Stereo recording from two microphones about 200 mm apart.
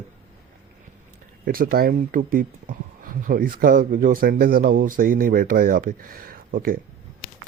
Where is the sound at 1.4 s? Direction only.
45° right (ahead or behind).